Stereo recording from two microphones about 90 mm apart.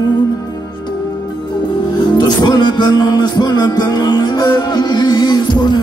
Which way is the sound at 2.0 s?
55° left (ahead or behind).